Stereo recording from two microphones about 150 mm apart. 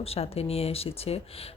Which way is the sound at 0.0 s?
40° left (ahead or behind).